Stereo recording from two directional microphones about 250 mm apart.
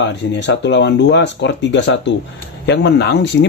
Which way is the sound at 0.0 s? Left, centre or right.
Left.